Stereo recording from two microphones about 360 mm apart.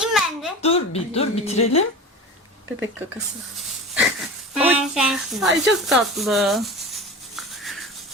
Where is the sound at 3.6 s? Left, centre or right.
Centre.